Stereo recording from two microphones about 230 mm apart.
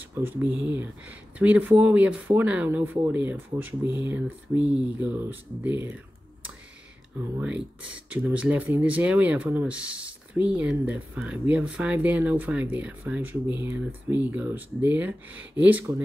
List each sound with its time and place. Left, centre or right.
0.1 s speech: centre
3.8 s speech: centre
4.1 s speech: centre
7.3 s speech: centre